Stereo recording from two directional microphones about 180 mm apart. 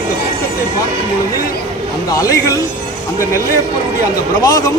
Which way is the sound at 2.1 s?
20° left (ahead or behind).